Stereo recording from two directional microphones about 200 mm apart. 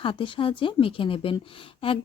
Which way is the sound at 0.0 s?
25° left (ahead or behind).